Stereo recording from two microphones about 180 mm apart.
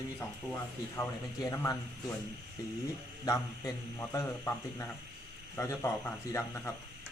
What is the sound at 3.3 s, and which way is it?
A man's voice, 20° left (ahead or behind).